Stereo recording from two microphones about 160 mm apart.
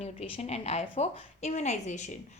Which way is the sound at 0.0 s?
40° left (ahead or behind).